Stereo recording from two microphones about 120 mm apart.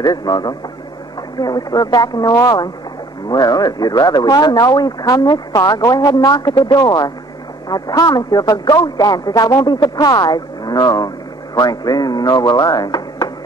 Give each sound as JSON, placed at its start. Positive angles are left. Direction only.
{"t": 0.0, "sound": "speech", "side_deg": 35}